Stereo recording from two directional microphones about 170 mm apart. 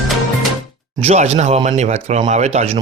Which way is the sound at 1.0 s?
40° right (ahead or behind).